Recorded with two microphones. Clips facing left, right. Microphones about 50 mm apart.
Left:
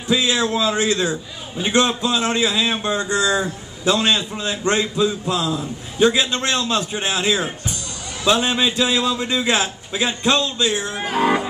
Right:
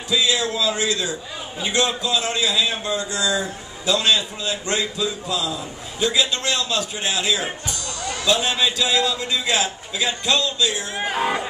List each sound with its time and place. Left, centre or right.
0.1 s a man's voice: left
11.0 s speech: centre